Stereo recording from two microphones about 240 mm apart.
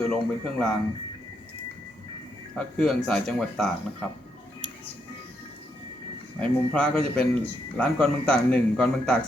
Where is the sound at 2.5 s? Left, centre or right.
Centre.